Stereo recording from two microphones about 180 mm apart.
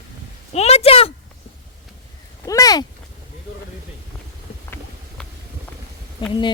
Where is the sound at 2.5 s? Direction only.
20° left (ahead or behind).